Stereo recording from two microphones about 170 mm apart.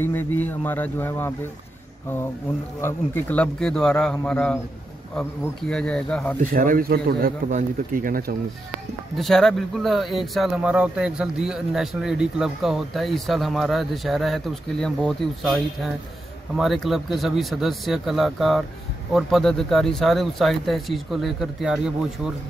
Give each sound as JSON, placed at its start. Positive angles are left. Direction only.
{"t": 0.0, "sound": "speech", "side_deg": 10}
{"t": 2.8, "sound": "speech", "side_deg": 10}
{"t": 6.4, "sound": "speech", "side_deg": -50}
{"t": 9.1, "sound": "speech", "side_deg": 0}